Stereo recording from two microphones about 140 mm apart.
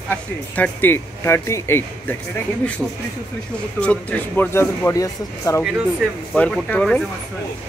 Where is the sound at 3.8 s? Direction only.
10° left (ahead or behind).